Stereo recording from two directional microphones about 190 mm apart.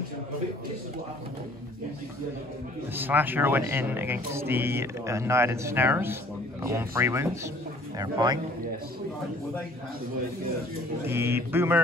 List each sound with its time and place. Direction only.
3.0 s speech: 10° right (ahead or behind)
11.1 s speech: 10° right (ahead or behind)